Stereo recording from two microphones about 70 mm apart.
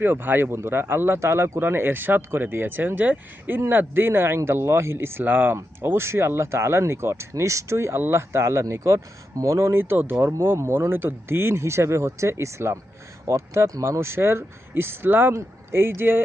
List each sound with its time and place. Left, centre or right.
0.0 s speech: right